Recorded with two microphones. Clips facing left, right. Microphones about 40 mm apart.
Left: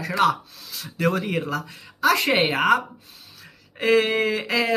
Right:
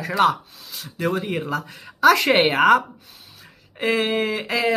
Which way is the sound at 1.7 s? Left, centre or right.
Right.